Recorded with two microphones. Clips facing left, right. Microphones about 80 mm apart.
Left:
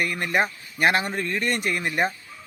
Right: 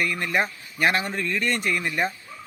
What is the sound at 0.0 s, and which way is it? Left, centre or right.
Speech, left.